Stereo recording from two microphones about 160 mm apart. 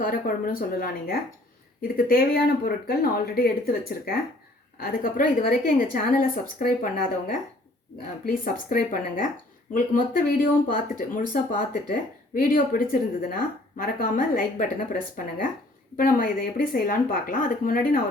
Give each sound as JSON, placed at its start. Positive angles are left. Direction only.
{"t": 0.0, "sound": "speech", "side_deg": 60}
{"t": 16.0, "sound": "speech", "side_deg": 60}